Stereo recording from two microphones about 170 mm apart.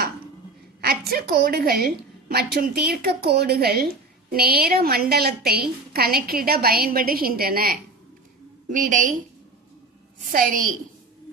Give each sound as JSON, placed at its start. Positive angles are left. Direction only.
{"t": 0.8, "sound": "a woman's voice", "side_deg": -65}
{"t": 10.3, "sound": "a woman's voice", "side_deg": -50}